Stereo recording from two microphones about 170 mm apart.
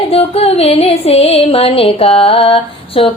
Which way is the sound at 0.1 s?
35° left (ahead or behind).